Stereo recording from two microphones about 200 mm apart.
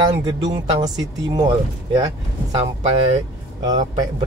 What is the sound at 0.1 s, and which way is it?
Speech, 20° right (ahead or behind).